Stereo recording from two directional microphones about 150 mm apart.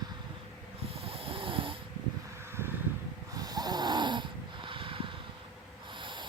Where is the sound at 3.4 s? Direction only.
25° right (ahead or behind).